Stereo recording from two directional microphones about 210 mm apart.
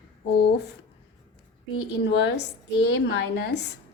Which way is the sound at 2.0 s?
55° left (ahead or behind).